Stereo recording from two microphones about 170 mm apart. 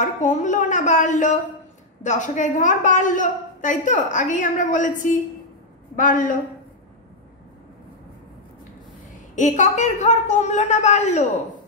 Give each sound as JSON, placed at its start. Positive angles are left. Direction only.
{"t": 0.0, "sound": "a woman's voice", "side_deg": 45}
{"t": 9.3, "sound": "a woman's voice", "side_deg": 45}